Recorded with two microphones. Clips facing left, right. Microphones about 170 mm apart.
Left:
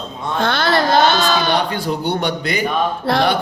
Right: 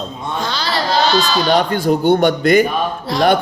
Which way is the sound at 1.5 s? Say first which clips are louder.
Right 5 dB; 50° right (ahead or behind).